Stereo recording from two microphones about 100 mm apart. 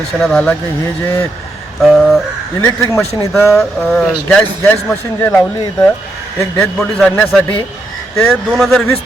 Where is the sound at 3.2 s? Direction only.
30° left (ahead or behind).